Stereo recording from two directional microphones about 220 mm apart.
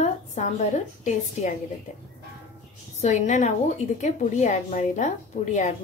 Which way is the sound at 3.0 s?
35° left (ahead or behind).